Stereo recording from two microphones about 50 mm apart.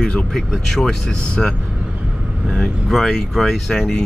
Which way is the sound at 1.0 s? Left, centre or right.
Left.